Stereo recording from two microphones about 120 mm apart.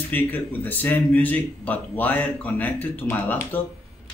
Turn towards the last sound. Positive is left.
turn(degrees=15)  # may be behind; listen again after turning